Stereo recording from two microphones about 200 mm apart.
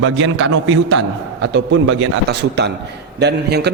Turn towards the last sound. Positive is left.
turn(degrees=-55)  # may be behind; listen again after turning